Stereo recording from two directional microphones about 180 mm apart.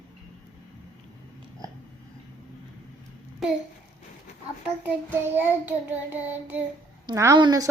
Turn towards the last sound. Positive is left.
turn(degrees=-20)  # may be behind; listen again after turning